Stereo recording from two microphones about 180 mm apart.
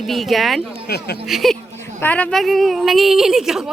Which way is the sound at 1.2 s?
Centre (ahead or behind).